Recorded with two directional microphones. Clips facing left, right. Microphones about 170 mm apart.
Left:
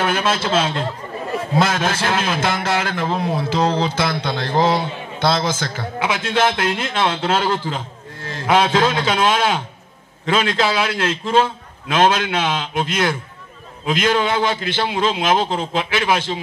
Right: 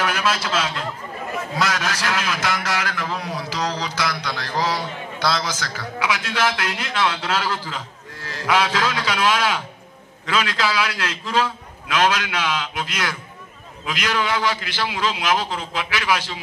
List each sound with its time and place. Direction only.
0.0 s a man's voice: 25° left (ahead or behind)